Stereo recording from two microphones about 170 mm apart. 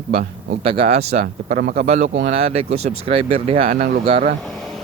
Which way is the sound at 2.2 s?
35° right (ahead or behind).